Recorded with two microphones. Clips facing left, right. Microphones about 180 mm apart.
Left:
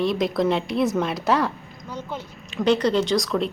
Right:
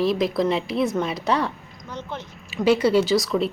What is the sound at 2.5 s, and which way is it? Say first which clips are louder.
Speech: right 2 dB; 5° right (ahead or behind).